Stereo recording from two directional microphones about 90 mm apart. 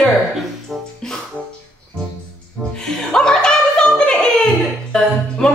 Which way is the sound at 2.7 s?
5° left (ahead or behind).